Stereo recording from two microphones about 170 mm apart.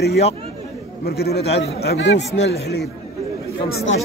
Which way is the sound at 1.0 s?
70° left (ahead or behind).